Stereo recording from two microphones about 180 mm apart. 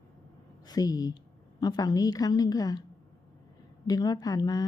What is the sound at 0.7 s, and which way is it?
A woman's voice, 20° left (ahead or behind).